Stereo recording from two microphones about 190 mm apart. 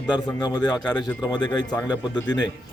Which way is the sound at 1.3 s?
20° left (ahead or behind).